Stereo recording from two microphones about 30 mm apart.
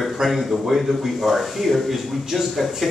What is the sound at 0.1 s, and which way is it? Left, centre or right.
A man's voice, centre.